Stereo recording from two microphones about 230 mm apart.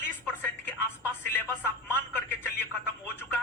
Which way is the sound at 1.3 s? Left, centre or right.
Centre.